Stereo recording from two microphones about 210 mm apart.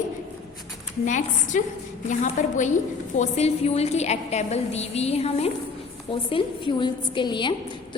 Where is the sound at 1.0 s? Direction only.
35° left (ahead or behind).